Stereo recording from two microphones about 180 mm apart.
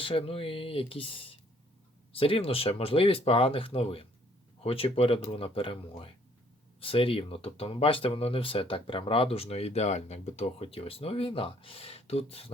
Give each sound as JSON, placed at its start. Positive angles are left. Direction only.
{"t": 0.0, "sound": "speech", "side_deg": 30}